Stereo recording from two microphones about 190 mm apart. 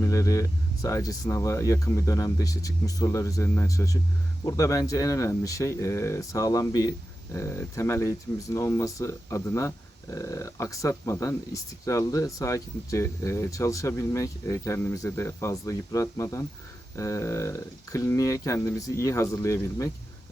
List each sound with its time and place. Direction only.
0.0 s speech: 15° left (ahead or behind)